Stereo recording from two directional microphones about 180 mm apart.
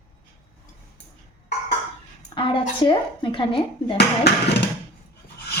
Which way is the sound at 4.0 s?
65° left (ahead or behind).